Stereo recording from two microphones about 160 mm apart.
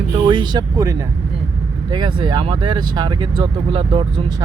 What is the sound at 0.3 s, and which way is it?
Speech, 25° right (ahead or behind).